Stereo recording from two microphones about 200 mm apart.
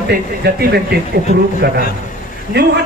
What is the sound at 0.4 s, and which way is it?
A man's voice, 55° right (ahead or behind).